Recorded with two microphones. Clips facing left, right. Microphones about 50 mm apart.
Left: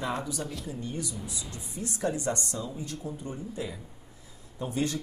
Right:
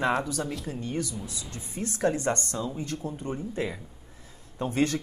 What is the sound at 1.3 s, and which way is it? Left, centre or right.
Speech, centre.